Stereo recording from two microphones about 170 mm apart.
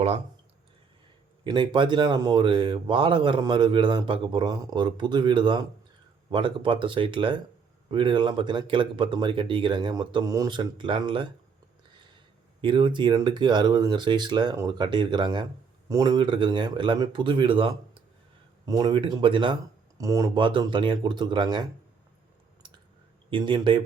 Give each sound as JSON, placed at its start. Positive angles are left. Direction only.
{"t": 1.5, "sound": "speech", "side_deg": -30}
{"t": 12.6, "sound": "speech", "side_deg": -30}
{"t": 20.0, "sound": "speech", "side_deg": -20}
{"t": 23.3, "sound": "speech", "side_deg": -25}